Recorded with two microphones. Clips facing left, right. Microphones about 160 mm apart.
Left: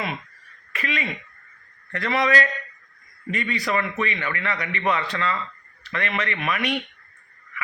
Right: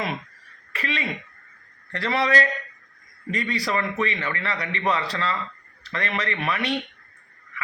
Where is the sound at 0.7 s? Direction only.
30° right (ahead or behind).